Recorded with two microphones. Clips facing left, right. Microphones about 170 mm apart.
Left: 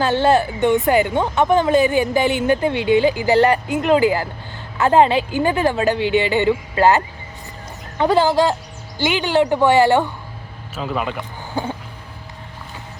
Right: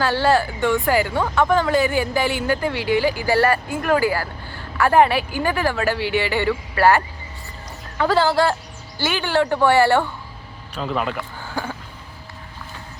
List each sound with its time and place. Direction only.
0.0 s a woman's voice: 20° left (ahead or behind)
10.8 s speech: centre (ahead or behind)
11.1 s speech: 20° left (ahead or behind)